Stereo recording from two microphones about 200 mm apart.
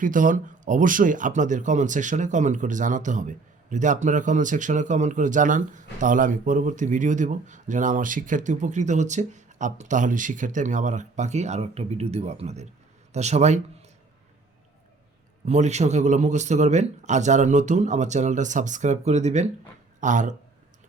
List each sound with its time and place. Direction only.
0.0 s speech: 40° right (ahead or behind)
15.4 s speech: 35° right (ahead or behind)